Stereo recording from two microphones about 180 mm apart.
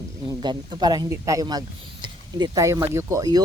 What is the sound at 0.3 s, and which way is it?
Speech, 25° right (ahead or behind).